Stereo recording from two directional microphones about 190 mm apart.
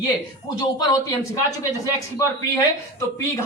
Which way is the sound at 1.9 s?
15° left (ahead or behind).